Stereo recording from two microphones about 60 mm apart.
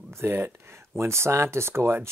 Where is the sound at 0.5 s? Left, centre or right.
Right.